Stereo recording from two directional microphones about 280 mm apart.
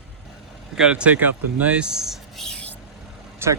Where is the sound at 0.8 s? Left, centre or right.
Centre.